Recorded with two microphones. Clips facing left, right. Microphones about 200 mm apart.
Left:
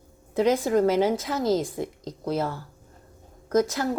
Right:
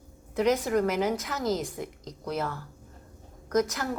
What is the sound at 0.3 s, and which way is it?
A woman's voice, 30° left (ahead or behind).